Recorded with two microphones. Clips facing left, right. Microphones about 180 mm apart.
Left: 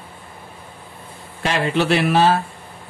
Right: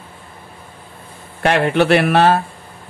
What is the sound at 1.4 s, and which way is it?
Speech, 60° right (ahead or behind).